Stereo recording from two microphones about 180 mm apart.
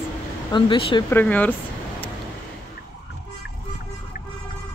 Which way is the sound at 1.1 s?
10° left (ahead or behind).